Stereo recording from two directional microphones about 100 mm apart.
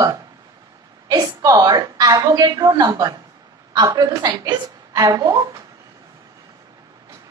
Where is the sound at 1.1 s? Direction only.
40° right (ahead or behind).